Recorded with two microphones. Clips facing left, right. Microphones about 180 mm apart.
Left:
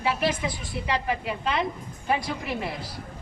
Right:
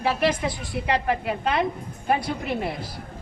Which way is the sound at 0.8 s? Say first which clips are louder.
Right 4 dB; 55° right (ahead or behind).